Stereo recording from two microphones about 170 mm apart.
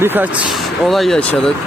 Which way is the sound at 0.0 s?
10° right (ahead or behind).